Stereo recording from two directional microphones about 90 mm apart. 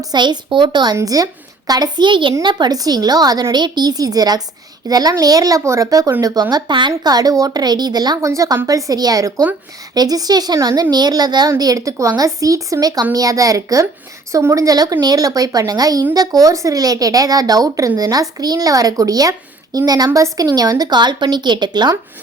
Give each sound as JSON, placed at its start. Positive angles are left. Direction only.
{"t": 0.0, "sound": "a woman's voice", "side_deg": -55}
{"t": 0.9, "sound": "a woman's voice", "side_deg": -40}
{"t": 6.5, "sound": "speech", "side_deg": -60}
{"t": 8.2, "sound": "speech", "side_deg": -35}